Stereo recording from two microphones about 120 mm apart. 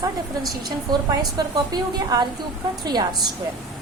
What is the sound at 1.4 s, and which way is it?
A woman's voice, 35° right (ahead or behind).